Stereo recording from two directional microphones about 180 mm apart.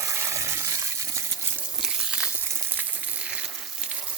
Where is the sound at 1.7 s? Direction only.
5° right (ahead or behind).